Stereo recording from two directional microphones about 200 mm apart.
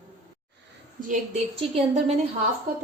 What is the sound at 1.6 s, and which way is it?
Speech, 35° right (ahead or behind).